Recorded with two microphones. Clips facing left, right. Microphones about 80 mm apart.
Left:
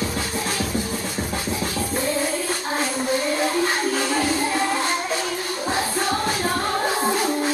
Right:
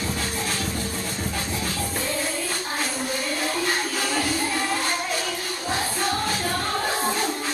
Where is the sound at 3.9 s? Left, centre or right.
Left.